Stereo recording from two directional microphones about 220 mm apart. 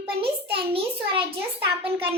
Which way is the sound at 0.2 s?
25° right (ahead or behind).